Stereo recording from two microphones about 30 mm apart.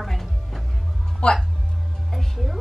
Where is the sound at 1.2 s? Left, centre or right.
Left.